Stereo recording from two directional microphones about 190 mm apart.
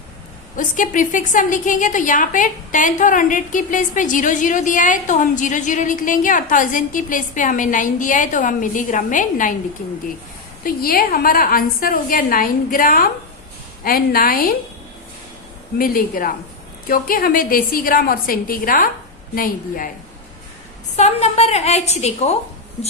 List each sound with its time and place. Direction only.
0.5 s a woman's voice: 45° left (ahead or behind)
10.6 s a woman's voice: 50° left (ahead or behind)
15.8 s a woman's voice: 50° left (ahead or behind)
20.9 s a woman's voice: 35° left (ahead or behind)